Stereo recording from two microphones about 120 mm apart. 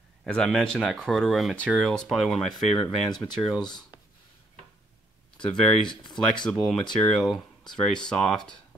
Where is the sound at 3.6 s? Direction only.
35° left (ahead or behind).